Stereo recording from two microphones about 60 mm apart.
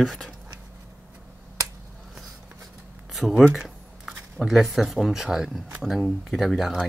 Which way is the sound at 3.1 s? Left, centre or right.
Centre.